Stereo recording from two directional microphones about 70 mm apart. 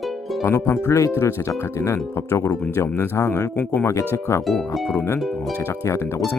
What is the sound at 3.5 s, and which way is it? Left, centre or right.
Speech, left.